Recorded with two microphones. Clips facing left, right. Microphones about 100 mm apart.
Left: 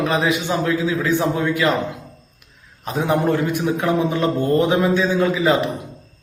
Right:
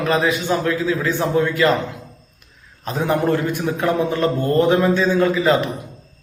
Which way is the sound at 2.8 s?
15° left (ahead or behind).